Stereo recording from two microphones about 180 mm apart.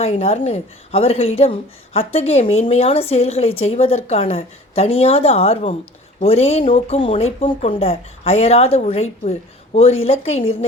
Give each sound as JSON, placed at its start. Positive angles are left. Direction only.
{"t": 0.0, "sound": "a woman's voice", "side_deg": 35}